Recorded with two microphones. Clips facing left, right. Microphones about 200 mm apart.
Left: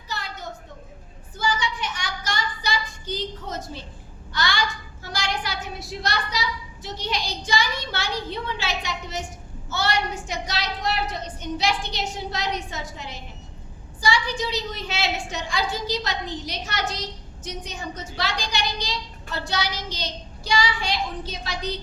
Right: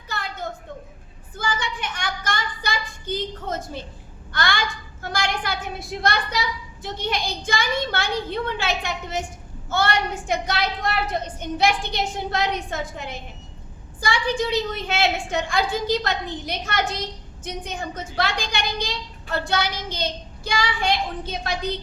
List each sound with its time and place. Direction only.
0.1 s a sound: 55° right (ahead or behind)
1.4 s child singing: 55° right (ahead or behind)
4.3 s a woman's voice: 55° right (ahead or behind)